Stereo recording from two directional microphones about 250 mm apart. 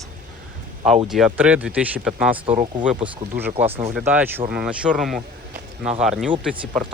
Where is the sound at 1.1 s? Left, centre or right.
Centre.